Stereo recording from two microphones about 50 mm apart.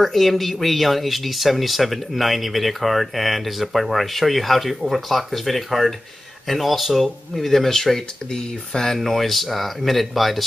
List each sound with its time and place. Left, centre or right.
0.0 s speech: centre